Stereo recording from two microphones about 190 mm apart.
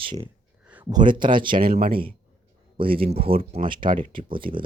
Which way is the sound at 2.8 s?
30° right (ahead or behind).